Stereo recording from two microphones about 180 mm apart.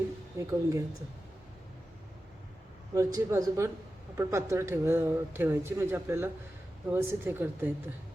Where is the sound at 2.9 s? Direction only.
20° right (ahead or behind).